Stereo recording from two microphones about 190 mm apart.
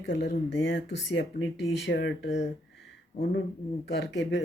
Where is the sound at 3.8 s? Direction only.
65° left (ahead or behind).